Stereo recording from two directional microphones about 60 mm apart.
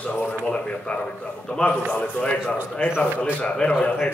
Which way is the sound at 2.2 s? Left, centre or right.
Centre.